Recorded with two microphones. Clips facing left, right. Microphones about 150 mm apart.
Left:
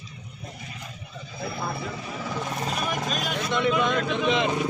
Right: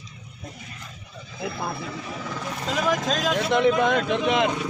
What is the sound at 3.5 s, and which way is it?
Speech, 50° right (ahead or behind).